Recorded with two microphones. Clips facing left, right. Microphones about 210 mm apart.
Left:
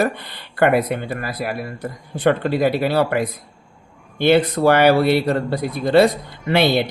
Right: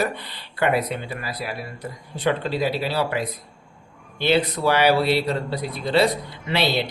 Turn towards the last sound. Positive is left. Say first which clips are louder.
# left 6 dB
turn(degrees=50)  # may be behind; listen again after turning